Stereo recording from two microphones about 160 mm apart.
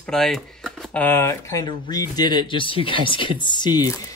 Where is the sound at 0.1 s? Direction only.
Centre (ahead or behind).